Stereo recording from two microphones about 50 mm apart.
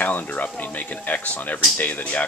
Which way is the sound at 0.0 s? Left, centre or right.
Left.